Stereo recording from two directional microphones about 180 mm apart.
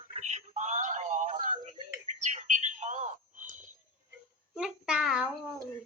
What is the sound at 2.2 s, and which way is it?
Bird, 40° right (ahead or behind).